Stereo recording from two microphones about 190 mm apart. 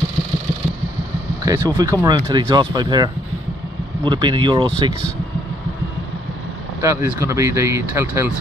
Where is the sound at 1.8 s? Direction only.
15° right (ahead or behind).